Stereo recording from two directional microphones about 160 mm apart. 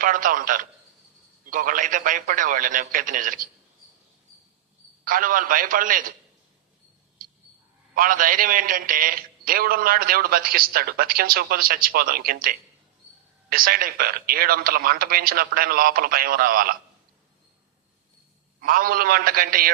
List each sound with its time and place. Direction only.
0.0 s a man's voice: 60° right (ahead or behind)
5.0 s a man's voice: 60° right (ahead or behind)
7.9 s a man's voice: 60° right (ahead or behind)
18.6 s a man's voice: 60° right (ahead or behind)